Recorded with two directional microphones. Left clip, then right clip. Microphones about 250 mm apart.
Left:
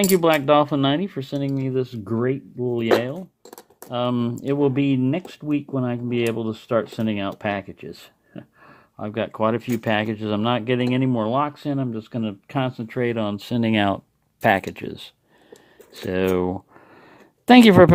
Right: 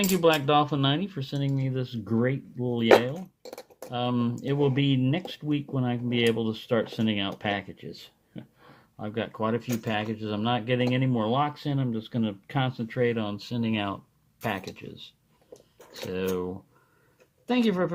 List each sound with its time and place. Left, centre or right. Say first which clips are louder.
0.0 s speech: left 5 dB; left